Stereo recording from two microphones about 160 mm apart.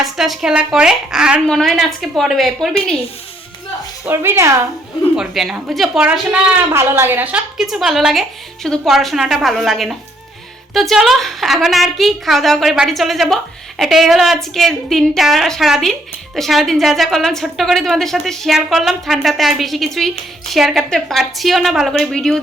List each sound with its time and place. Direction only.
0.0 s a woman's voice: centre (ahead or behind)
4.0 s a woman's voice: 15° right (ahead or behind)
5.1 s a woman's voice: 5° right (ahead or behind)
6.7 s a woman's voice: 15° right (ahead or behind); by 22.4 s 5° left (ahead or behind)